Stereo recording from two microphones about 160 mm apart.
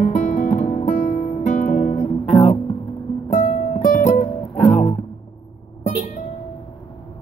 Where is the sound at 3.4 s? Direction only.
55° left (ahead or behind).